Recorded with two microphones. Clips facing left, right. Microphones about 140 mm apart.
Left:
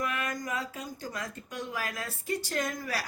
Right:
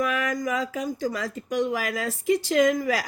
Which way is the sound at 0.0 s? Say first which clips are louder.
Right 8 dB; 90° right.